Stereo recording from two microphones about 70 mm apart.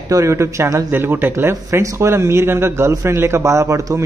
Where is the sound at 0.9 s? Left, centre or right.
Right.